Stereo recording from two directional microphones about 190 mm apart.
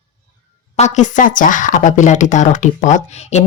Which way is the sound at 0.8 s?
40° left (ahead or behind).